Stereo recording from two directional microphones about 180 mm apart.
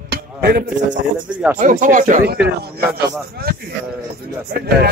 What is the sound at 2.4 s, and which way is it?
A man's voice, 60° right (ahead or behind).